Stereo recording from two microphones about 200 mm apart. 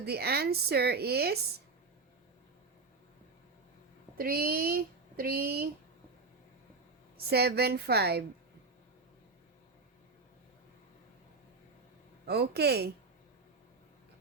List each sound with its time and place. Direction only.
0.0 s speech: 55° right (ahead or behind)
4.2 s speech: 50° right (ahead or behind)
7.3 s speech: 55° right (ahead or behind)
12.2 s speech: 55° right (ahead or behind)